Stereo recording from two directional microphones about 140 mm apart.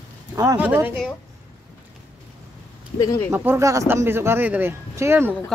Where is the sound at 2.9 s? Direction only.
25° left (ahead or behind).